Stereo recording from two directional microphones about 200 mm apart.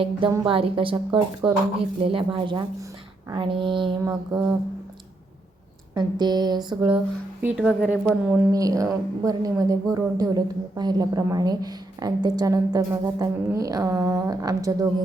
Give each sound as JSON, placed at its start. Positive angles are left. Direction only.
{"t": 0.0, "sound": "a woman's voice", "side_deg": -25}
{"t": 5.9, "sound": "a woman's voice", "side_deg": -20}
{"t": 7.4, "sound": "a woman's voice", "side_deg": -5}